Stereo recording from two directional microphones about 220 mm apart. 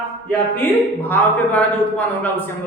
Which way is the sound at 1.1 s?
5° left (ahead or behind).